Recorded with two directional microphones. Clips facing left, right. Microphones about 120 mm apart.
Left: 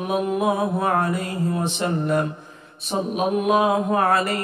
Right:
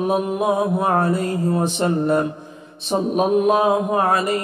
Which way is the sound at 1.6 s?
35° right (ahead or behind).